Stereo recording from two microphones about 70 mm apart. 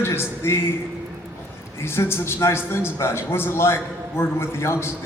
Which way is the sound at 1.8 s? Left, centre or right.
Left.